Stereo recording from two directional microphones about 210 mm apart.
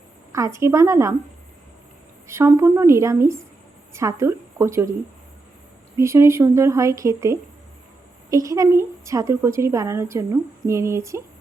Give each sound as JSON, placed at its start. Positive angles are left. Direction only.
{"t": 0.3, "sound": "a woman's voice", "side_deg": -15}
{"t": 2.2, "sound": "a woman's voice", "side_deg": -15}
{"t": 6.0, "sound": "a woman's voice", "side_deg": -15}